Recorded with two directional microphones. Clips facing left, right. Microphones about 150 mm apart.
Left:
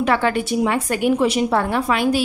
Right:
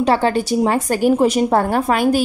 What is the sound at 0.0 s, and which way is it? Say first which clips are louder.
A woman's voice: right 3 dB; 35° right (ahead or behind).